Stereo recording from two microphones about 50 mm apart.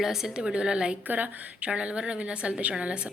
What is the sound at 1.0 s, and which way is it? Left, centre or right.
A woman's voice, right.